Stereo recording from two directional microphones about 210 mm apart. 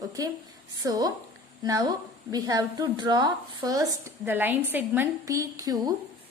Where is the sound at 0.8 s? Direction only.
15° right (ahead or behind).